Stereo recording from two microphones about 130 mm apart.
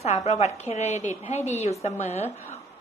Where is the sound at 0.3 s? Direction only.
60° left (ahead or behind).